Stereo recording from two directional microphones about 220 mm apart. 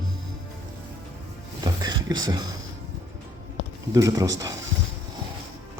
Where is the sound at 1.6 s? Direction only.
20° right (ahead or behind).